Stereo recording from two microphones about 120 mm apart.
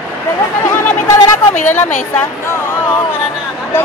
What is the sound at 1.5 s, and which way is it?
Speech, 90° left.